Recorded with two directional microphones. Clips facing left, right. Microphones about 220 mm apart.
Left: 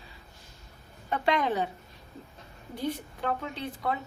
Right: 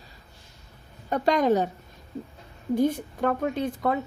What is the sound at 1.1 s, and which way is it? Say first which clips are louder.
Speech: right 6 dB; 40° right (ahead or behind).